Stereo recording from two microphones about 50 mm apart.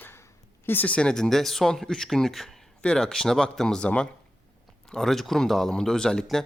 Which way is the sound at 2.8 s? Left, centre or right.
Centre.